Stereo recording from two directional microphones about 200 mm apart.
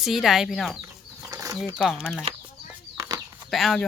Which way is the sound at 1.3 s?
15° right (ahead or behind).